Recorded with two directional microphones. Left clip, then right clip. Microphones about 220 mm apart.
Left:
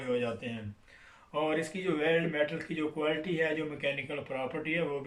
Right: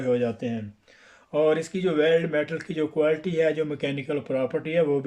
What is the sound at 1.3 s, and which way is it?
Speech, 50° right (ahead or behind).